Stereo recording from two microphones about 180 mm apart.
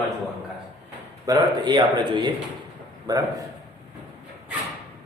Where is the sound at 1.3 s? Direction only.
25° right (ahead or behind).